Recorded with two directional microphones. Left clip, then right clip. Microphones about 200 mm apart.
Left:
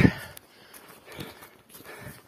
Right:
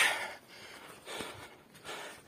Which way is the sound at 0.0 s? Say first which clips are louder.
Left 3 dB; 20° right (ahead or behind).